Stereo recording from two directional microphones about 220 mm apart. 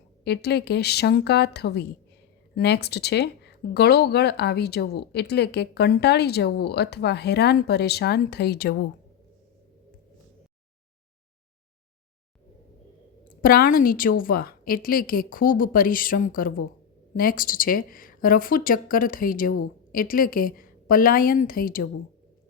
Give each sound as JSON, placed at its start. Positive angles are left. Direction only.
{"t": 0.3, "sound": "speech", "side_deg": 50}
{"t": 13.2, "sound": "a woman's voice", "side_deg": 40}